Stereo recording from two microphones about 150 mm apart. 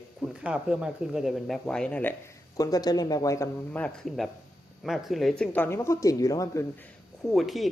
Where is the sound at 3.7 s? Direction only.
5° left (ahead or behind); by 6.6 s 25° left (ahead or behind).